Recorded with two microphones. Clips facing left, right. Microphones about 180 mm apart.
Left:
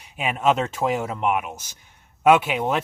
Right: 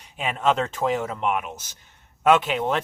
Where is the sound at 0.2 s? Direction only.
10° left (ahead or behind).